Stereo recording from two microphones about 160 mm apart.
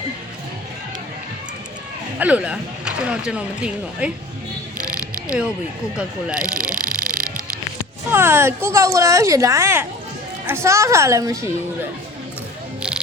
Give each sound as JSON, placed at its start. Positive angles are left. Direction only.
{"t": 2.1, "sound": "speech", "side_deg": -10}
{"t": 6.0, "sound": "speech", "side_deg": -5}
{"t": 6.4, "sound": "ratchet", "side_deg": -60}
{"t": 6.7, "sound": "a sound", "side_deg": -60}
{"t": 8.1, "sound": "speech", "side_deg": -15}